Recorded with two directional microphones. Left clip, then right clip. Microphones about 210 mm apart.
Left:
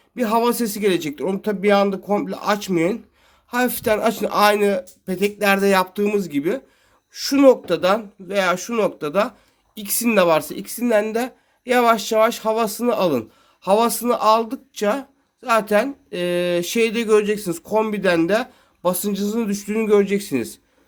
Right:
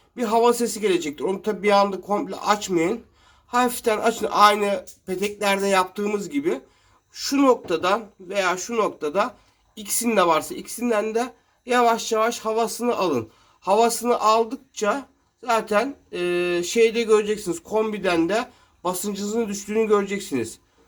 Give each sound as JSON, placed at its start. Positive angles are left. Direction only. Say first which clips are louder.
{"t": 0.2, "sound": "a man's voice", "louder": "even", "side_deg": 35}